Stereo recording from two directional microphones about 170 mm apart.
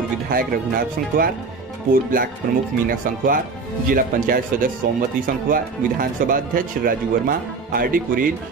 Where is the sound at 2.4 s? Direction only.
55° right (ahead or behind).